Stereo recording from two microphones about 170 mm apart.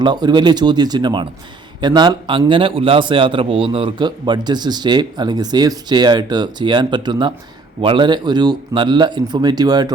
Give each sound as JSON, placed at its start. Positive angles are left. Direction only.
{"t": 0.0, "sound": "a man's voice", "side_deg": -25}